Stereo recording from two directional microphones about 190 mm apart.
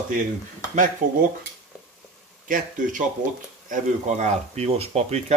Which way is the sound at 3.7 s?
40° right (ahead or behind).